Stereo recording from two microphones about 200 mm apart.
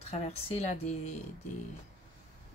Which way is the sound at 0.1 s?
30° left (ahead or behind).